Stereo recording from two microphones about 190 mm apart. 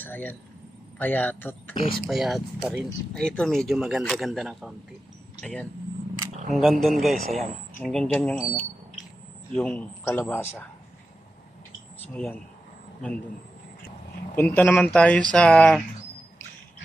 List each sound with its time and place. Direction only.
0.0 s a man's voice: 10° left (ahead or behind)
1.7 s speech: 30° left (ahead or behind)
2.0 s a man's voice: centre (ahead or behind)
12.1 s a man's voice: 10° left (ahead or behind)
14.3 s a man's voice: 10° left (ahead or behind)